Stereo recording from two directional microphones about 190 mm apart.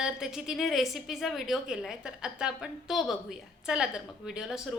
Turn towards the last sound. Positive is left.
turn(degrees=-5)  # may be behind; listen again after turning